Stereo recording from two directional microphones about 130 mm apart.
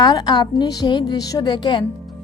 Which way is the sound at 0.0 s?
30° left (ahead or behind).